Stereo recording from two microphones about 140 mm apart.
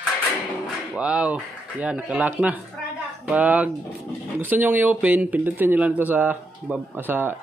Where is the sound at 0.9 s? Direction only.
10° right (ahead or behind).